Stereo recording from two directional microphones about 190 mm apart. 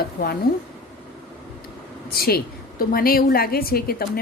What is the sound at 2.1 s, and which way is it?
A woman's voice, 55° left (ahead or behind).